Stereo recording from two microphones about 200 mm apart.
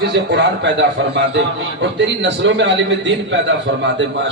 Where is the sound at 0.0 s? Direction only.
60° right (ahead or behind).